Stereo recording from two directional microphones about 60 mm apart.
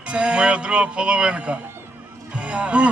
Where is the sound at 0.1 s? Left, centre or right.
Centre.